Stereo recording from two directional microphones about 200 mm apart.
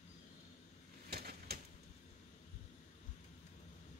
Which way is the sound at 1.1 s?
50° right (ahead or behind).